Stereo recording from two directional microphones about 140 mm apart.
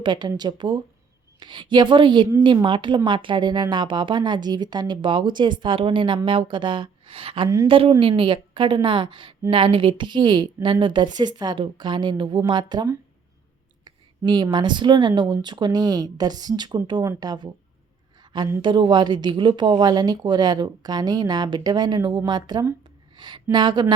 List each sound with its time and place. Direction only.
0.0 s speech: 30° right (ahead or behind)
18.6 s speech: 35° right (ahead or behind)